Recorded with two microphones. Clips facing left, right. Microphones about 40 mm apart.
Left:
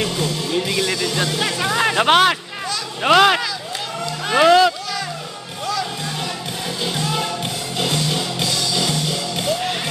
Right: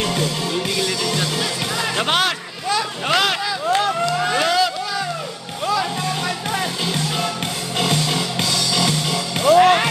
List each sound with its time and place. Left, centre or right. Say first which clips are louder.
0.5 s music: left 1 dB; left
2.0 s speech: left 5 dB; centre
4.4 s music: left 8 dB; left
7.7 s music: right 2 dB; right